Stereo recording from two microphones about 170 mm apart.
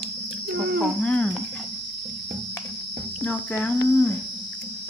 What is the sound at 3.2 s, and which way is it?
Speech, 10° left (ahead or behind).